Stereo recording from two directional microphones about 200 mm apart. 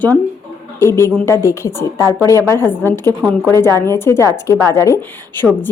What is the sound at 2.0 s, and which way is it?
Speech, 15° right (ahead or behind).